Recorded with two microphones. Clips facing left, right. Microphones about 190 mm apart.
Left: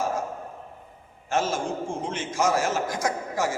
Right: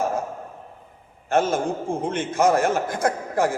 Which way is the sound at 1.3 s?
55° right (ahead or behind).